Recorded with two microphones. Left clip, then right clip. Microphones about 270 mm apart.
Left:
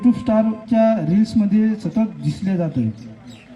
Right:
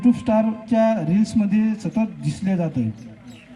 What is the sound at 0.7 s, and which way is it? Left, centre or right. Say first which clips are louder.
Speech: left 2 dB; right.